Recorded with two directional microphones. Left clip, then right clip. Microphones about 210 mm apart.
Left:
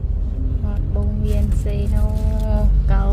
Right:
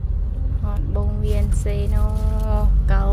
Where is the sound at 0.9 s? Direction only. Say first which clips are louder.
Even; 20° right (ahead or behind).